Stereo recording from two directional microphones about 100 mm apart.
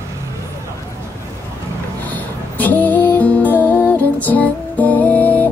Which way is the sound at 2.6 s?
15° left (ahead or behind).